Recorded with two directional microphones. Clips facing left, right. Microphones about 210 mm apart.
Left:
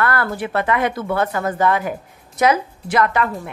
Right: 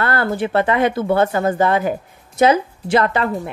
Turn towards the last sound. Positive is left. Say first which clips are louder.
# right 2 dB
turn(degrees=-30)  # may be behind; listen again after turning